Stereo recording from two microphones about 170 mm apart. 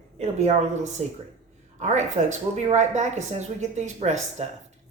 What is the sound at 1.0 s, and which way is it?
A woman's voice, 40° right (ahead or behind).